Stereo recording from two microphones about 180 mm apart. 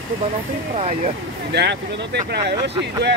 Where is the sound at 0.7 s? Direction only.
40° right (ahead or behind).